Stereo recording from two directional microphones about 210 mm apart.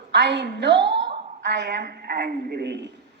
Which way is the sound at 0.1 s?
55° right (ahead or behind).